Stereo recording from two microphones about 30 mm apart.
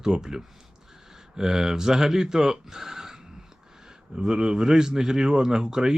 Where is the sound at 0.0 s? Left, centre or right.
Right.